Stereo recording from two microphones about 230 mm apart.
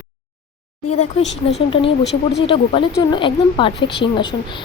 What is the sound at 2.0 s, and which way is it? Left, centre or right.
Speech, left.